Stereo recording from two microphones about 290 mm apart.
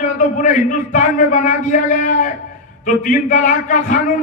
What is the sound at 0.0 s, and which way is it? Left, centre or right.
A man's voice, left.